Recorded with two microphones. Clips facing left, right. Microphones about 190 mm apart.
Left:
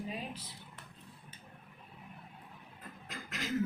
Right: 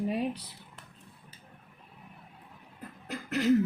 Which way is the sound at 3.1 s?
65° right (ahead or behind).